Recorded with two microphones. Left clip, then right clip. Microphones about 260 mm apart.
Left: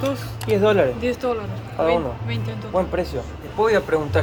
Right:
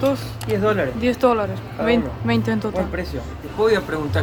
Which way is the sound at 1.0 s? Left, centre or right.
Centre.